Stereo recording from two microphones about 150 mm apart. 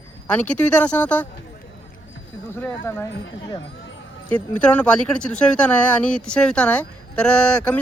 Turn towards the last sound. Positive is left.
turn(degrees=10)  # may be behind; listen again after turning